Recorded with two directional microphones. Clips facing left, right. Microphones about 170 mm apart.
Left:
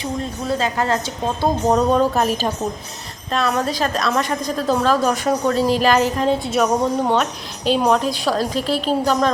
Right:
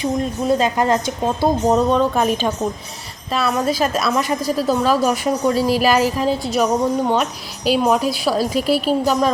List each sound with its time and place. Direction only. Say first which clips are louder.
0.0 s a woman's voice: right 5 dB; 15° right (ahead or behind)
1.9 s a woman's voice: even; 5° left (ahead or behind)